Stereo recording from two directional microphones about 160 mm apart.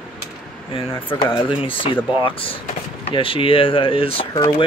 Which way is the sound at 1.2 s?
30° left (ahead or behind).